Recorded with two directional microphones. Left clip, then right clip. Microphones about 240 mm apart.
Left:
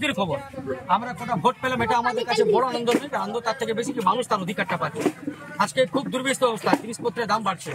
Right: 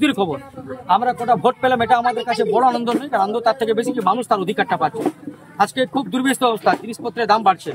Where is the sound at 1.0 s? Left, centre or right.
Right.